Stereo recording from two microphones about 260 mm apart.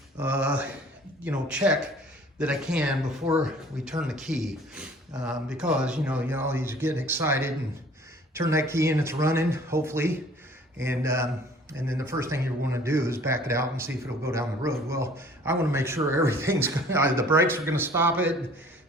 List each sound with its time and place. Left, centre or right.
0.2 s speech: centre